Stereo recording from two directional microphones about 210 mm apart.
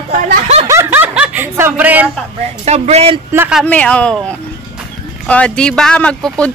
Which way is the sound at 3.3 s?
10° right (ahead or behind).